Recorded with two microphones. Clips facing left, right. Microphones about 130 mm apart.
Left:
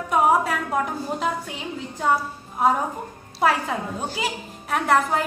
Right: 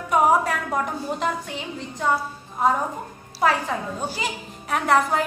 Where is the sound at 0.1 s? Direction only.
Centre (ahead or behind).